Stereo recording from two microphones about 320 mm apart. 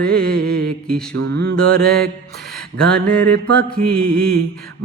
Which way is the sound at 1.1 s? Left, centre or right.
Right.